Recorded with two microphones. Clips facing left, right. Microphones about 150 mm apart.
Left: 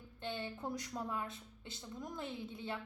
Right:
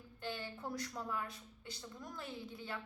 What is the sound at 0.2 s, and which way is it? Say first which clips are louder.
A woman's voice: left 2 dB; 25° left (ahead or behind).